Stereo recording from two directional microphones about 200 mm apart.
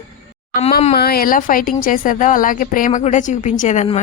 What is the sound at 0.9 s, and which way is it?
Speech, 50° left (ahead or behind).